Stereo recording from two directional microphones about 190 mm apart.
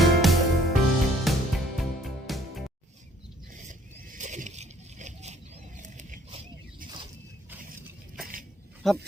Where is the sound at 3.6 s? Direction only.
40° right (ahead or behind).